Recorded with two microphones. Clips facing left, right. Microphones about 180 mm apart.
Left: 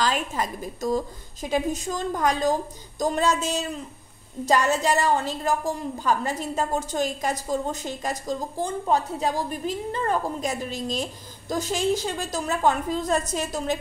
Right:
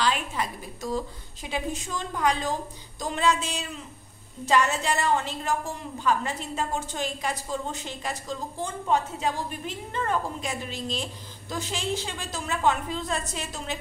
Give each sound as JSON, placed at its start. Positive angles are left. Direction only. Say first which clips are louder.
{"t": 0.0, "sound": "a woman's voice", "louder": "left 2 dB", "side_deg": 40}